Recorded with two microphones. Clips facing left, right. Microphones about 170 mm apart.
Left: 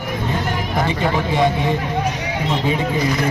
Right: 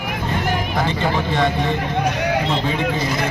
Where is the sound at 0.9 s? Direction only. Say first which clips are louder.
Left 1 dB; 10° left (ahead or behind).